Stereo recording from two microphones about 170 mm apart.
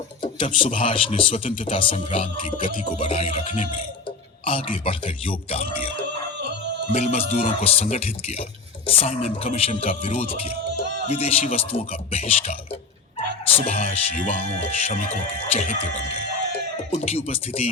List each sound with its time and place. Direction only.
0.2 s speech: 30° left (ahead or behind)
6.9 s speech: 40° left (ahead or behind)
16.9 s speech: 35° left (ahead or behind)